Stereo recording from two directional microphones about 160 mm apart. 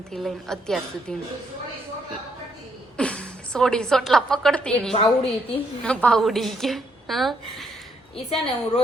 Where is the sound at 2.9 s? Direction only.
5° left (ahead or behind).